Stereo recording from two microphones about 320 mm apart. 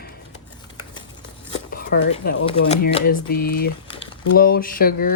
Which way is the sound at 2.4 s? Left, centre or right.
Centre.